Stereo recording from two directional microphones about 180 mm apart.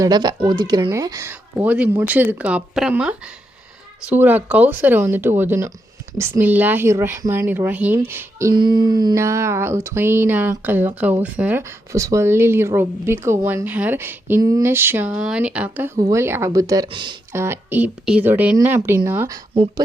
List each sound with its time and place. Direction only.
0.0 s speech: 20° right (ahead or behind)
17.3 s speech: 15° right (ahead or behind)